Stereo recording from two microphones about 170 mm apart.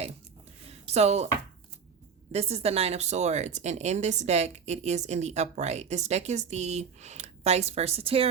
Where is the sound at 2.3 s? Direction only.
40° right (ahead or behind).